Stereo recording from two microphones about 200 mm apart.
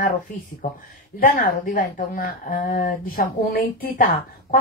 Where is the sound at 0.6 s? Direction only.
40° left (ahead or behind).